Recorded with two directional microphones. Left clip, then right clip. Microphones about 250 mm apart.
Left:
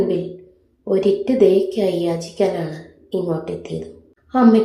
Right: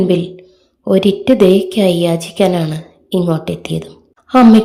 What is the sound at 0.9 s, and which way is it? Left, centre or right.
A woman's voice, right.